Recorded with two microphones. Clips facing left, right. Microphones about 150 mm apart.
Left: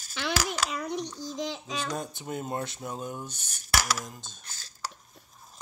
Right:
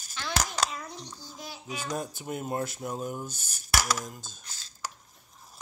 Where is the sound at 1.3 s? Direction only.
90° left.